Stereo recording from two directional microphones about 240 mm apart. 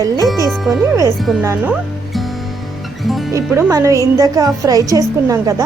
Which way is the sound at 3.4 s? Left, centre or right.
Centre.